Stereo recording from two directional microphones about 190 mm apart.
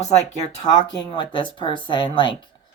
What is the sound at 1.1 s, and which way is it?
Speech, 25° left (ahead or behind).